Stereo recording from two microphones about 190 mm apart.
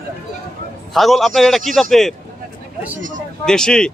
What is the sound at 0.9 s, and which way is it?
A man's voice, centre (ahead or behind).